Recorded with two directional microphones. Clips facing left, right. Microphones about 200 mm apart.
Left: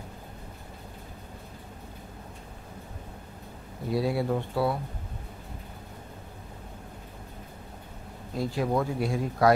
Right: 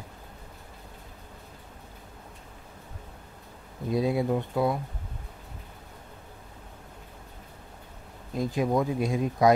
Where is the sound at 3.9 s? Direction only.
20° right (ahead or behind).